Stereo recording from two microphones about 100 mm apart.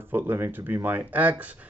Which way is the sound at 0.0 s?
20° right (ahead or behind).